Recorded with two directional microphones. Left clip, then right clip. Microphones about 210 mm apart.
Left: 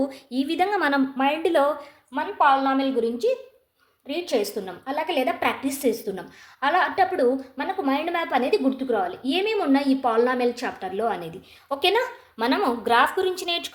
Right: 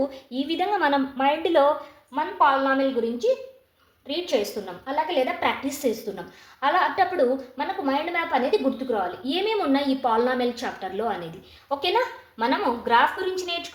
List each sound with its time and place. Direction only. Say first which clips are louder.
0.1 s a woman's voice: left 1 dB; 30° left (ahead or behind)
2.1 s a woman's voice: left 1 dB; 50° left (ahead or behind)
4.0 s a woman's voice: even; 25° left (ahead or behind); by 13.6 s 45° left (ahead or behind)